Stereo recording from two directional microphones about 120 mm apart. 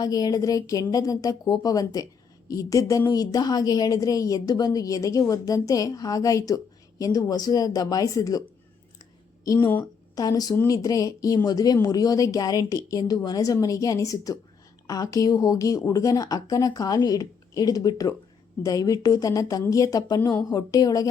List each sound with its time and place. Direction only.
0.0 s a woman's voice: 30° left (ahead or behind)
10.2 s a woman's voice: 30° left (ahead or behind)